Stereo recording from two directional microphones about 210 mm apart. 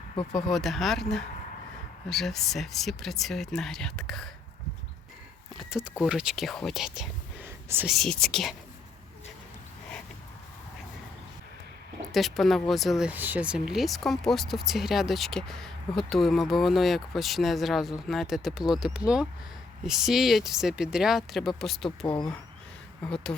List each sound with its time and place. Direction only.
0.3 s speech: centre (ahead or behind)
5.5 s speech: centre (ahead or behind)
12.1 s speech: centre (ahead or behind)
22.0 s speech: 15° left (ahead or behind)
23.0 s speech: 5° left (ahead or behind)